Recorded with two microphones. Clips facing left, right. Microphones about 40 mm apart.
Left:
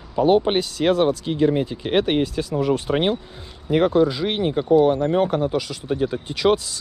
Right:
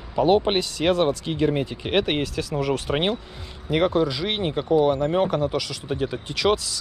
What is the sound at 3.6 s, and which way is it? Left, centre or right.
Speech, right.